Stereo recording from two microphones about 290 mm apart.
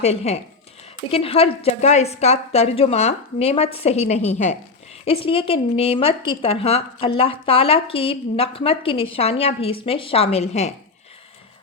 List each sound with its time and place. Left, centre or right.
0.0 s speech: left